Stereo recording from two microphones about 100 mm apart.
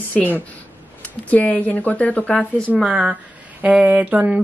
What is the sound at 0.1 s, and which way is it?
A woman's voice, 15° left (ahead or behind).